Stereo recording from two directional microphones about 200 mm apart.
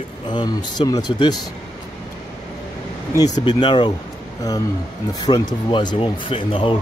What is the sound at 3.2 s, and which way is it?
Speech, 20° left (ahead or behind).